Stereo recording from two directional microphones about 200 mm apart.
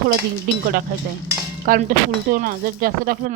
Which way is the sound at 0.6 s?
50° right (ahead or behind).